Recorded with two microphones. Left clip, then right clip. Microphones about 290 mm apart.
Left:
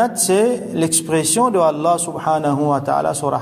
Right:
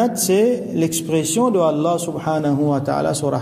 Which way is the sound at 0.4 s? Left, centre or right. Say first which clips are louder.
Even; centre.